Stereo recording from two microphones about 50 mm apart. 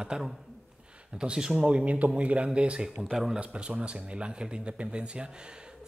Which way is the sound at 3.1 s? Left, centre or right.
Centre.